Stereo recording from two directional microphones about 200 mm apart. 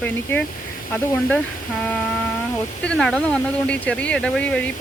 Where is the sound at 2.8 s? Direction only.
5° left (ahead or behind).